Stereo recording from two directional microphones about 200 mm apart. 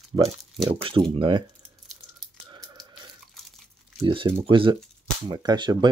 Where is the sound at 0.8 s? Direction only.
25° right (ahead or behind).